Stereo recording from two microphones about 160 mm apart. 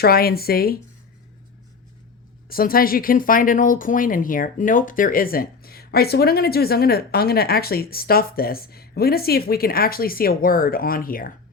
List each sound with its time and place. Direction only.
0.0 s speech: 70° left (ahead or behind)
2.5 s speech: 65° left (ahead or behind)